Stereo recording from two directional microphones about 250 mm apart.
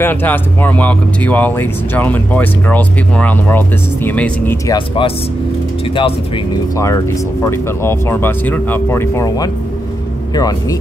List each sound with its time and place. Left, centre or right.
0.0 s speech: centre
4.7 s speech: centre